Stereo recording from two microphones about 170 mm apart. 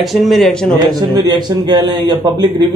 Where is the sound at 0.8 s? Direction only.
25° right (ahead or behind).